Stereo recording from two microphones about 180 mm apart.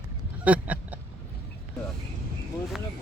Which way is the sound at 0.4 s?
10° right (ahead or behind).